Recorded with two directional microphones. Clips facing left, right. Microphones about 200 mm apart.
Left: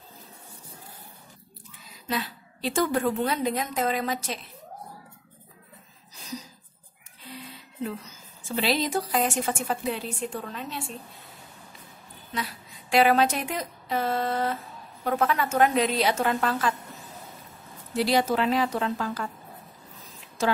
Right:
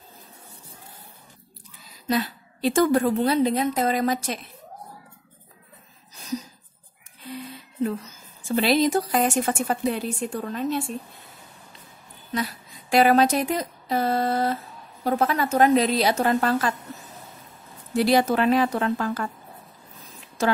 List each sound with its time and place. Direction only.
2.0 s a woman's voice: 45° right (ahead or behind)
8.5 s a woman's voice: 45° right (ahead or behind)
12.9 s a woman's voice: 45° right (ahead or behind)
17.9 s a woman's voice: 55° right (ahead or behind)